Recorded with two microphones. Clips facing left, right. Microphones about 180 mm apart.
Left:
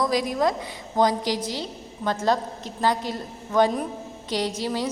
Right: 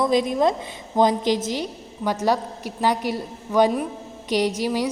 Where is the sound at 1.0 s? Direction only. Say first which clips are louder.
Right 3 dB; 20° right (ahead or behind).